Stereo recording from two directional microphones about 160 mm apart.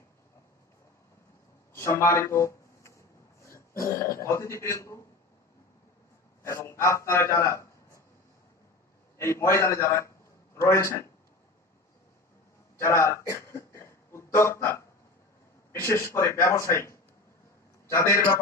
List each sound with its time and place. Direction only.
1.7 s a man's voice: 15° left (ahead or behind)
6.4 s a man's voice: 15° left (ahead or behind)
9.1 s a man's voice: 15° left (ahead or behind)
12.8 s a sound: 15° left (ahead or behind)
15.7 s a man's voice: 15° left (ahead or behind)